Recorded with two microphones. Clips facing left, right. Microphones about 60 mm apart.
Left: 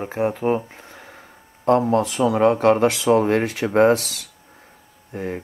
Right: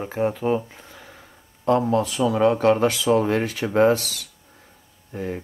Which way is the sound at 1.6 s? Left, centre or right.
Left.